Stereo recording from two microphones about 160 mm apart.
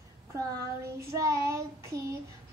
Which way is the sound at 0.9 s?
20° right (ahead or behind).